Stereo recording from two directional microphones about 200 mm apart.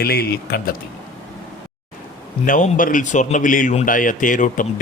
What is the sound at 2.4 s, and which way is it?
Speech, 40° left (ahead or behind).